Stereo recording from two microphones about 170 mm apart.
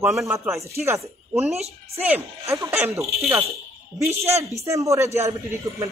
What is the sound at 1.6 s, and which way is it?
Speech, 40° right (ahead or behind).